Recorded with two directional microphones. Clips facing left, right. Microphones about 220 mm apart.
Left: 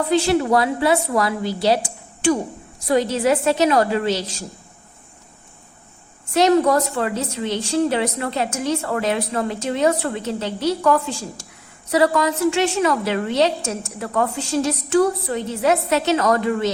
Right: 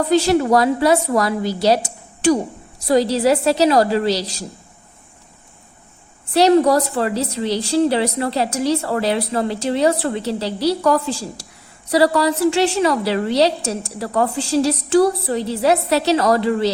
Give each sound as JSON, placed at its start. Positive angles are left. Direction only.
{"t": 0.1, "sound": "a woman's voice", "side_deg": -40}
{"t": 6.3, "sound": "a woman's voice", "side_deg": -35}